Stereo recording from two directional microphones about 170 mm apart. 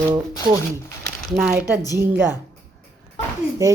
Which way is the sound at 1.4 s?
5° right (ahead or behind).